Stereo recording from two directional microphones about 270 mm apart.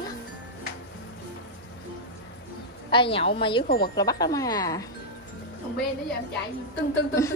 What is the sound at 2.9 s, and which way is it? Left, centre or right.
Speech, centre.